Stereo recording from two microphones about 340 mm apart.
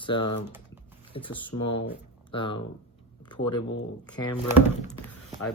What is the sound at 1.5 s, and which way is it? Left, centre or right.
Speech, left.